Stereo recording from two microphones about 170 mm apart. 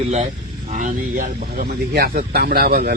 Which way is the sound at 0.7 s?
45° right (ahead or behind).